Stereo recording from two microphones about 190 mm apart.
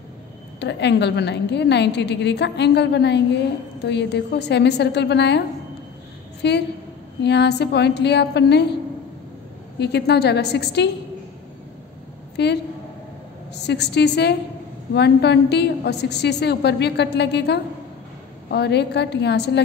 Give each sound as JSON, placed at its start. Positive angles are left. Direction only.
{"t": 0.6, "sound": "a woman's voice", "side_deg": 65}
{"t": 6.4, "sound": "a woman's voice", "side_deg": 60}
{"t": 9.8, "sound": "a woman's voice", "side_deg": 60}
{"t": 12.4, "sound": "a woman's voice", "side_deg": 60}
{"t": 13.6, "sound": "a woman's voice", "side_deg": 60}